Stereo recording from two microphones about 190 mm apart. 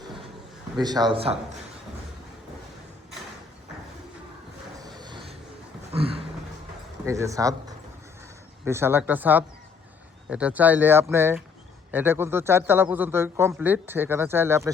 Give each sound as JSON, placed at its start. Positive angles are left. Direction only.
{"t": 0.8, "sound": "speech", "side_deg": -20}
{"t": 4.9, "sound": "train", "side_deg": -25}
{"t": 5.9, "sound": "a sound", "side_deg": -30}
{"t": 7.0, "sound": "a man's voice", "side_deg": -15}
{"t": 8.6, "sound": "a man's voice", "side_deg": -10}